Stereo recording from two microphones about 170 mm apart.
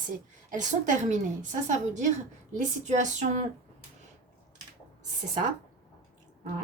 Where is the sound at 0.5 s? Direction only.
45° right (ahead or behind).